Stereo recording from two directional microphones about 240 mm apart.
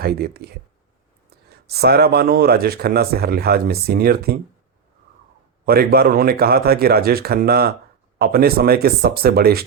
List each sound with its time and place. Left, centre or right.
0.0 s speech: right
5.6 s speech: right